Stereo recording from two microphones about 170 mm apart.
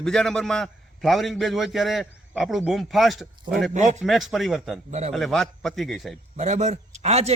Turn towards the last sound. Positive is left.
turn(degrees=-40)  # may be behind; listen again after turning